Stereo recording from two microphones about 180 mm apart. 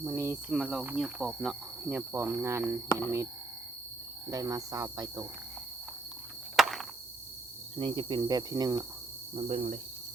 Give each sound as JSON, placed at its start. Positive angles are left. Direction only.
{"t": 0.0, "sound": "cricket", "side_deg": -10}
{"t": 4.3, "sound": "speech", "side_deg": -20}
{"t": 6.6, "sound": "chop", "side_deg": 0}
{"t": 7.8, "sound": "speech", "side_deg": -30}
{"t": 9.3, "sound": "cricket", "side_deg": -35}